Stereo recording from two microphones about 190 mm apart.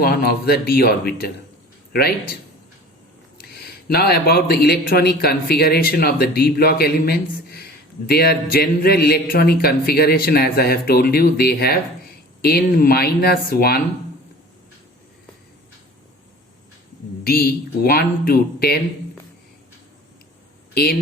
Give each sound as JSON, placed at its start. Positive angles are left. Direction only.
{"t": 0.0, "sound": "a man's voice", "side_deg": 55}
{"t": 3.3, "sound": "a man's voice", "side_deg": 55}
{"t": 17.2, "sound": "speech", "side_deg": 55}